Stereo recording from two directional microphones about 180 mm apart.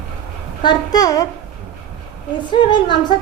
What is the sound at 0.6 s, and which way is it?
Speech, 20° left (ahead or behind).